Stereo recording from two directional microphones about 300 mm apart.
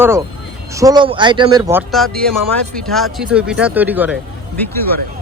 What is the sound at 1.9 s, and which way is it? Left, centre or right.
Speech, centre.